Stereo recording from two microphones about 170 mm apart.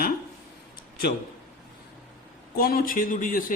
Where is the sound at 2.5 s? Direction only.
60° left (ahead or behind).